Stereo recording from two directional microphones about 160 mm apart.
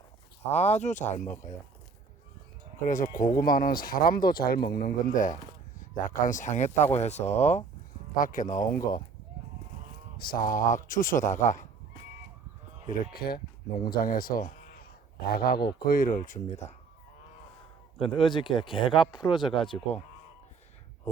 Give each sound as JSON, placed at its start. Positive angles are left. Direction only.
{"t": 0.5, "sound": "speech", "side_deg": 45}
{"t": 2.8, "sound": "speech", "side_deg": 55}
{"t": 8.2, "sound": "speech", "side_deg": 55}
{"t": 10.2, "sound": "speech", "side_deg": 65}
{"t": 12.9, "sound": "speech", "side_deg": 75}
{"t": 15.5, "sound": "speech", "side_deg": 75}
{"t": 15.9, "sound": "speech", "side_deg": 60}
{"t": 18.0, "sound": "speech", "side_deg": 35}